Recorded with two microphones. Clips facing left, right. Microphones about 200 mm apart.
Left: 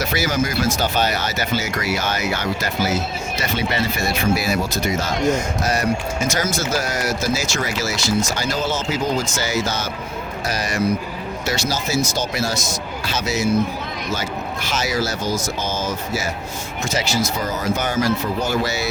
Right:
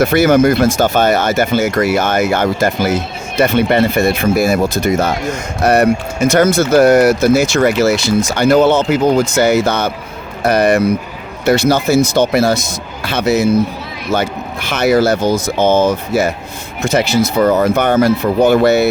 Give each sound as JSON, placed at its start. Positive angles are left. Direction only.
{"t": 0.0, "sound": "speech", "side_deg": -55}